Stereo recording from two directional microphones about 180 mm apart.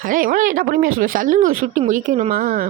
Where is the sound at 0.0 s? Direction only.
50° right (ahead or behind).